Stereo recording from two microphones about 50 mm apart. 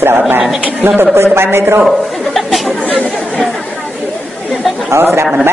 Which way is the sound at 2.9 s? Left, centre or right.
Left.